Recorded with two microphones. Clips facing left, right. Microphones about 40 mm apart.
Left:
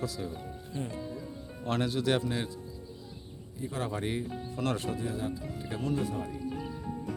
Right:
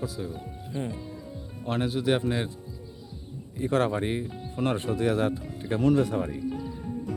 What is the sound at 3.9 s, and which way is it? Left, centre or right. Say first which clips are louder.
Speech: right 4 dB; right.